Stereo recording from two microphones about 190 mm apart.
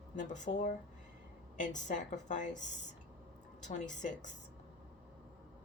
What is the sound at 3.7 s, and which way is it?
Speech, 40° left (ahead or behind).